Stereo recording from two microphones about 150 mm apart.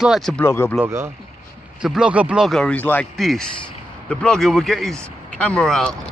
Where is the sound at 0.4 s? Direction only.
15° left (ahead or behind).